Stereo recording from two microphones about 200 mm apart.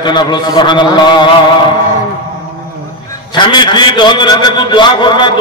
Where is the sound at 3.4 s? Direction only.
20° left (ahead or behind).